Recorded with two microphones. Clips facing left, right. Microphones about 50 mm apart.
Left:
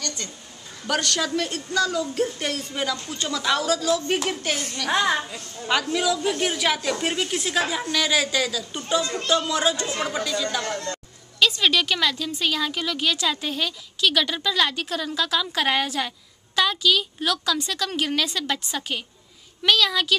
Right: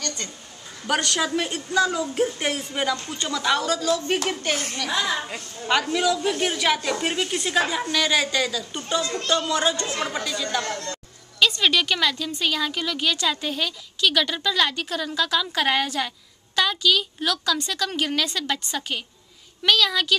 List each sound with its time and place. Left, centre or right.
0.0 s a sound: centre
0.8 s a woman's voice: centre
4.9 s a woman's voice: left
5.6 s a woman's voice: centre
9.1 s speech: centre
9.4 s a woman's voice: centre
10.6 s speech: centre
11.3 s a woman's voice: centre